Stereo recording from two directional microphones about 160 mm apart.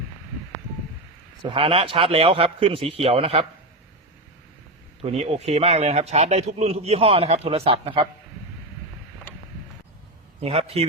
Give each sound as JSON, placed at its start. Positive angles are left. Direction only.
{"t": 1.4, "sound": "a man's voice", "side_deg": -30}
{"t": 5.0, "sound": "a man's voice", "side_deg": -40}
{"t": 10.4, "sound": "a man's voice", "side_deg": -40}